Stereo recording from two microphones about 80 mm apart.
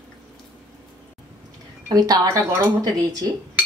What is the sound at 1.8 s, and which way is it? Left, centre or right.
Speech, right.